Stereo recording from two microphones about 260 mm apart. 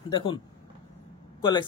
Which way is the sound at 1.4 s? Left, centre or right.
Centre.